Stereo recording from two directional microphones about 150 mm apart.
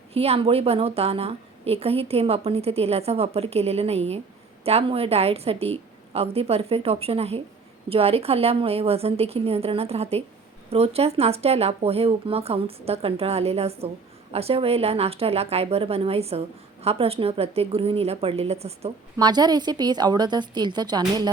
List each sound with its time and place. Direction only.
0.1 s a woman's voice: 40° right (ahead or behind)
19.1 s a woman's voice: 30° right (ahead or behind)